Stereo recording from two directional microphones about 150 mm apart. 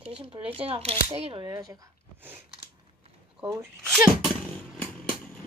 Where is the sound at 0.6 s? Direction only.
40° right (ahead or behind).